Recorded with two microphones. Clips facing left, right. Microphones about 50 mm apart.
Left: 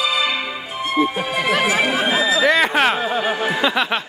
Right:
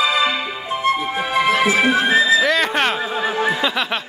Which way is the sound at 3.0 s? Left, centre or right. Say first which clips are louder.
Left 1 dB; left.